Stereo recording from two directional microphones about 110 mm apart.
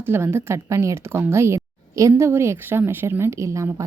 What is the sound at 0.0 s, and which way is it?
A woman's voice, 20° right (ahead or behind).